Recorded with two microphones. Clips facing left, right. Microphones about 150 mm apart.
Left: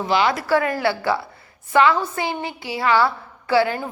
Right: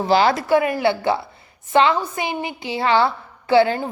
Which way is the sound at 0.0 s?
35° right (ahead or behind).